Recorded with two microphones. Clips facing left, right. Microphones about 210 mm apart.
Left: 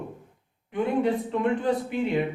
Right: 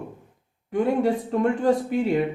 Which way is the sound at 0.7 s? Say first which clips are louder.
Right 3 dB; 40° right (ahead or behind).